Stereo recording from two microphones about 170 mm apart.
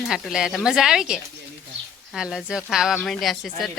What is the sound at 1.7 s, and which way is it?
Bird, 90° right.